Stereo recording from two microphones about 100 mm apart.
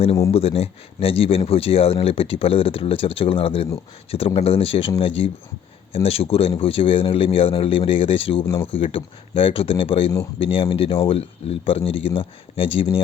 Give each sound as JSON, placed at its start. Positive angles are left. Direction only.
{"t": 0.3, "sound": "speech", "side_deg": 80}
{"t": 5.9, "sound": "speech", "side_deg": 85}
{"t": 6.6, "sound": "speech", "side_deg": 65}